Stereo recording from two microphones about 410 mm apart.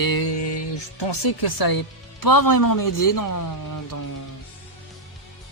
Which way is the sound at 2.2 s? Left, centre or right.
Left.